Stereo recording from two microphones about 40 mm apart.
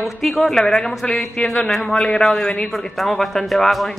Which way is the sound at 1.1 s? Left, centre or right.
Left.